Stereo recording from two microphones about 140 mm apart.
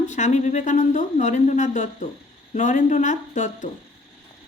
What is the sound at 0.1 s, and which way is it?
Speech, 55° left (ahead or behind).